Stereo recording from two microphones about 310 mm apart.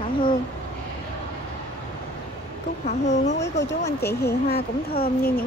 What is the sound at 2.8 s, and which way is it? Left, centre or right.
Speech, left.